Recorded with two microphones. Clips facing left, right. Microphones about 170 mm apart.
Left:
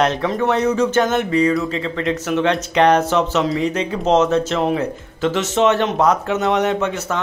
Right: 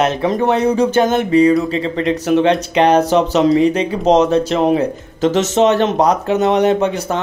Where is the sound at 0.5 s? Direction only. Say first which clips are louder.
Right 2 dB; 25° right (ahead or behind).